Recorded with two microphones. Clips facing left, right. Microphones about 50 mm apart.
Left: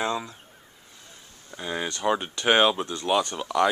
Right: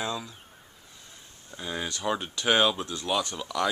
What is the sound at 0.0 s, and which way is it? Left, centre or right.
Speech, left.